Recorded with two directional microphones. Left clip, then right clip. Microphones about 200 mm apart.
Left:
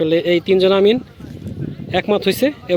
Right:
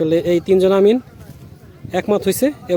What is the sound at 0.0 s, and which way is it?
Speech, 10° right (ahead or behind).